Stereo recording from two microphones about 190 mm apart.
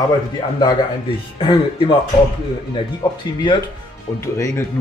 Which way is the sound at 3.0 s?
25° left (ahead or behind).